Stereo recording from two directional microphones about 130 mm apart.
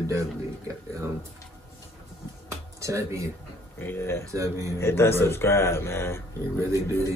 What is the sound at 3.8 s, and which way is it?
Speech, 15° left (ahead or behind).